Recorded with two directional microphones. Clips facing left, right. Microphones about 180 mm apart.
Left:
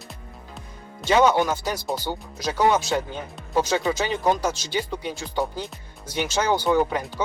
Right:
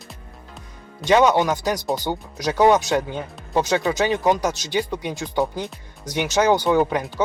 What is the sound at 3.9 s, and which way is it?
Speech, 15° right (ahead or behind).